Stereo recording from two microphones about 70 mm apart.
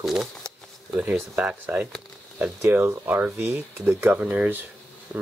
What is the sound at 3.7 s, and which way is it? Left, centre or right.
Speech, right.